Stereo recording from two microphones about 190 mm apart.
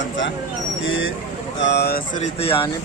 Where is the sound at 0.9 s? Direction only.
90° left.